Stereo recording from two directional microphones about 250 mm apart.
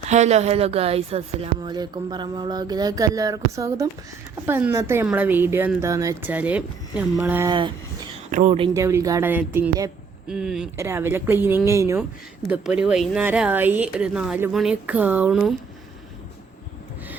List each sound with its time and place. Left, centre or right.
0.1 s speech: right
8.3 s speech: right; by 15.5 s centre